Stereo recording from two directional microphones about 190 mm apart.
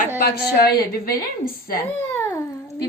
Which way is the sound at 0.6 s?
55° left (ahead or behind).